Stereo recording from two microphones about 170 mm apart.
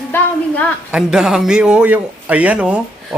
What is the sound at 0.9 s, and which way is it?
A man's voice, 5° right (ahead or behind).